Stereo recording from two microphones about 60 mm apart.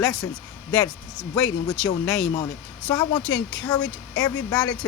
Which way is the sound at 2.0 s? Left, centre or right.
Left.